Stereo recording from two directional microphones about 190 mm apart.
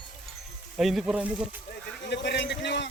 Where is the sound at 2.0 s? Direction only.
65° left (ahead or behind).